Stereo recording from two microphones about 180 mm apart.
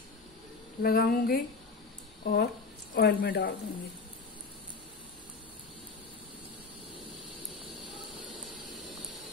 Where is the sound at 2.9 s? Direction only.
55° left (ahead or behind).